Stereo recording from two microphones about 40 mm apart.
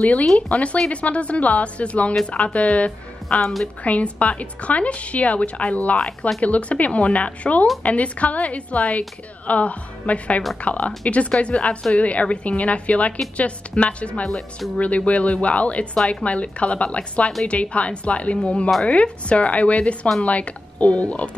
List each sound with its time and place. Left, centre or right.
0.0 s speech: left
5.9 s speech: centre
6.4 s speech: left